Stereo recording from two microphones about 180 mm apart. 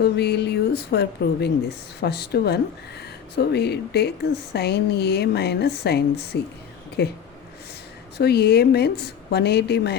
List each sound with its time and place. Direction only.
0.0 s speech: 65° left (ahead or behind)
7.0 s speech: 65° left (ahead or behind)
8.2 s speech: 60° left (ahead or behind)